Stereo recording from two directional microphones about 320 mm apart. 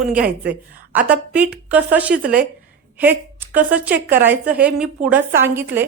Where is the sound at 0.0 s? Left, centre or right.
Centre.